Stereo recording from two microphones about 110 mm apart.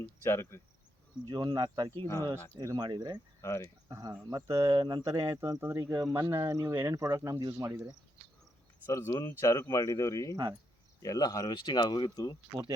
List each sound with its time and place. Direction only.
0.0 s cricket: 25° left (ahead or behind)
1.3 s speech: 35° right (ahead or behind)
2.0 s cricket: 25° left (ahead or behind)
2.6 s speech: 35° right (ahead or behind)
3.4 s cricket: 25° left (ahead or behind)
3.8 s speech: 35° right (ahead or behind)
5.0 s speech: 25° right (ahead or behind)
8.9 s cricket: 30° left (ahead or behind)
9.4 s speech: 30° left (ahead or behind)